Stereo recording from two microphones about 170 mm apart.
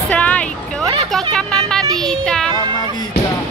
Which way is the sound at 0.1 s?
10° left (ahead or behind).